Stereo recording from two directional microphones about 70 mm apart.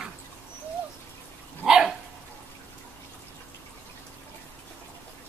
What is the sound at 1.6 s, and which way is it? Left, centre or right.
Dog, centre.